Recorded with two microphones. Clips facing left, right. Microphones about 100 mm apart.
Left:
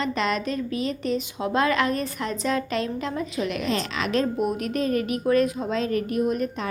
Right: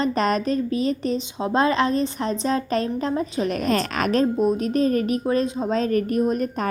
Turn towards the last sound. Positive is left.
turn(degrees=-45)  # may be behind; listen again after turning